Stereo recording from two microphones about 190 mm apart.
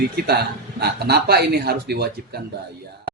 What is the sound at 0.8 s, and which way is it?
Speech, 55° right (ahead or behind).